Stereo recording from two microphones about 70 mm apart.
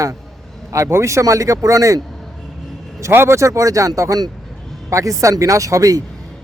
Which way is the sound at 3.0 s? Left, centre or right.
Right.